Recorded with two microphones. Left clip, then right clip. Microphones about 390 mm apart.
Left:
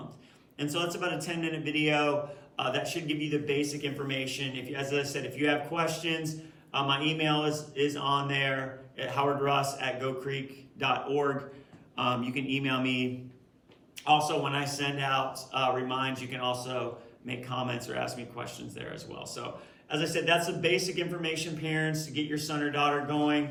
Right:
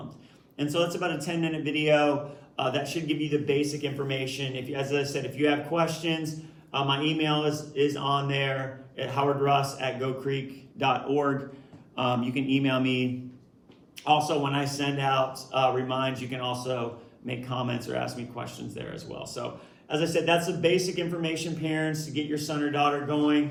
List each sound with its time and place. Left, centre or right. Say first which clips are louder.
0.5 s a man's voice: right 5 dB; centre